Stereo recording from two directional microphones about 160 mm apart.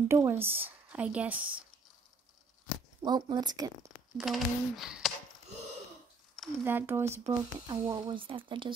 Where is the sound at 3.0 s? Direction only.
25° right (ahead or behind).